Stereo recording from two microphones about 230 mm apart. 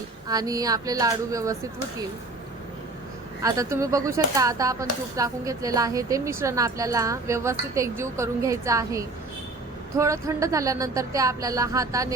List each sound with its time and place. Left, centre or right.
0.3 s speech: centre
3.4 s speech: centre